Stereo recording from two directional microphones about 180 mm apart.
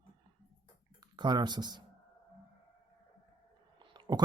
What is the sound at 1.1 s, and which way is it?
Speech, 25° right (ahead or behind).